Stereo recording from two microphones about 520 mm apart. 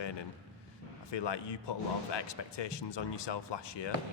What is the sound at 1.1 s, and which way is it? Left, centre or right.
Speech, left.